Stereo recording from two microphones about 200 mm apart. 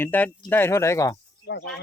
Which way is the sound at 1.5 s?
60° left (ahead or behind).